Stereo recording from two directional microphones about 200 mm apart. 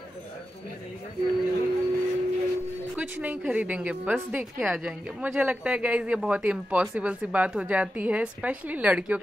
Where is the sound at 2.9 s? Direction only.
5° right (ahead or behind).